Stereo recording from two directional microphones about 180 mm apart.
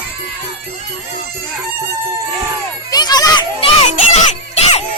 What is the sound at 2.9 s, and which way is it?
Children playing, 20° left (ahead or behind).